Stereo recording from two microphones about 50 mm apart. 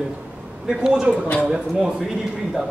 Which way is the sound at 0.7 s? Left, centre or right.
Centre.